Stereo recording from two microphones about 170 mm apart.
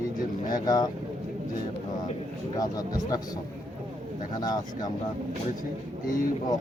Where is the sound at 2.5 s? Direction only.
20° left (ahead or behind).